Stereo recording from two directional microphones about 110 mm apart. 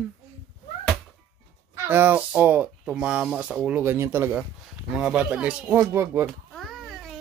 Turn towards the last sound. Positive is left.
turn(degrees=0)  # may be behind; listen again after turning